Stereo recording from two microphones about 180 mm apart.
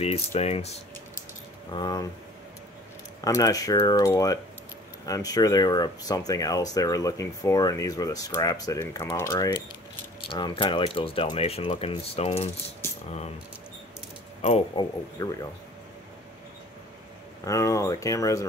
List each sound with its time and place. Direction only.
0.0 s speech: 35° left (ahead or behind)
1.7 s speech: 25° left (ahead or behind)
3.2 s speech: 20° left (ahead or behind)
10.3 s speech: 30° left (ahead or behind)
14.4 s speech: 35° left (ahead or behind)
15.2 s speech: 20° left (ahead or behind)
17.5 s speech: 15° left (ahead or behind)